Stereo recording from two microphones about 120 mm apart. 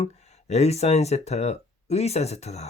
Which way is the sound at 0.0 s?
65° left (ahead or behind).